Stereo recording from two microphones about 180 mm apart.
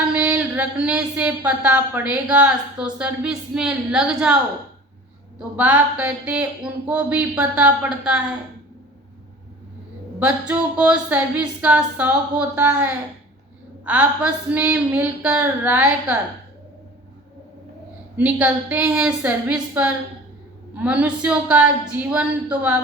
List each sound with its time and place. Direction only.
0.1 s speech: 10° right (ahead or behind)
5.4 s speech: 10° right (ahead or behind)
10.2 s speech: 5° right (ahead or behind)
18.2 s speech: 5° right (ahead or behind)